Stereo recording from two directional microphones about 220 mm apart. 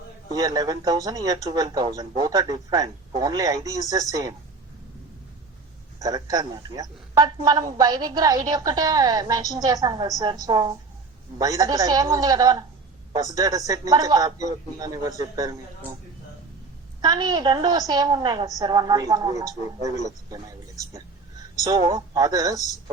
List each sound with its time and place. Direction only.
0.3 s a man's voice: 15° right (ahead or behind)
6.0 s a man's voice: 15° right (ahead or behind)
17.0 s a man's voice: 20° right (ahead or behind)